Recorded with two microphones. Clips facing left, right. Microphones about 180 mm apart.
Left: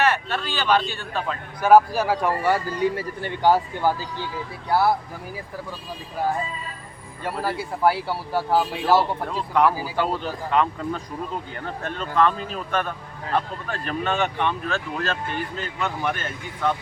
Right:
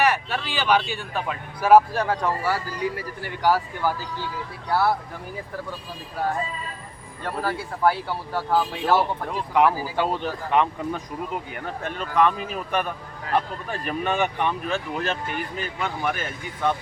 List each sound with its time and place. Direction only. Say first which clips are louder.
0.0 s speech: even; 10° right (ahead or behind); by 3.9 s 20° left (ahead or behind)
7.3 s speech: left 1 dB; 10° left (ahead or behind)
9.0 s speech: left 1 dB; 15° right (ahead or behind)